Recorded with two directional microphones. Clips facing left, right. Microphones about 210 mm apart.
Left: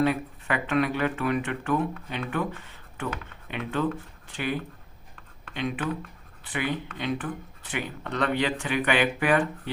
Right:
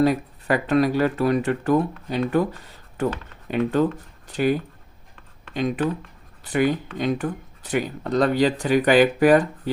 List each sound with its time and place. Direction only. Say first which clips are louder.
0.0 s speech: right 5 dB; 40° right (ahead or behind)
5.5 s speech: right 6 dB; 40° right (ahead or behind)